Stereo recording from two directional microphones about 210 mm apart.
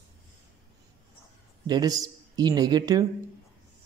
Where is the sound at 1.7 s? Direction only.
20° right (ahead or behind).